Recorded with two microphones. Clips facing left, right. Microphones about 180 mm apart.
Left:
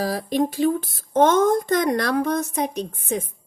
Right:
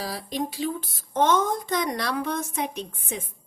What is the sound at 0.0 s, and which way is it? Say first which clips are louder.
Speech: left 8 dB; 50° left (ahead or behind).